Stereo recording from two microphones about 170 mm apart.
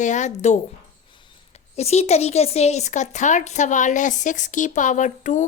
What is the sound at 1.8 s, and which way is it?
Speech, 40° left (ahead or behind).